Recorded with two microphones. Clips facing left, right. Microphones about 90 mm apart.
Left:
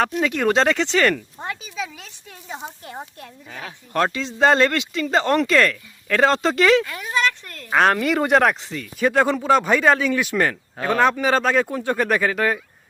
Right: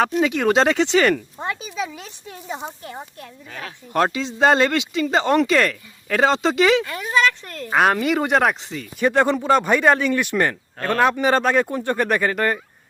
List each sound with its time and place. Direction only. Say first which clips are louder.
0.0 s speech: right 2 dB; 5° right (ahead or behind)
2.6 s speech: right 1 dB; 5° left (ahead or behind)
3.2 s speech: right 1 dB; 15° left (ahead or behind)
3.9 s speech: right 1 dB; 15° right (ahead or behind)
4.2 s speech: left 1 dB; 5° right (ahead or behind)
6.9 s speech: right 3 dB; 20° right (ahead or behind)
7.7 s speech: even; 5° right (ahead or behind)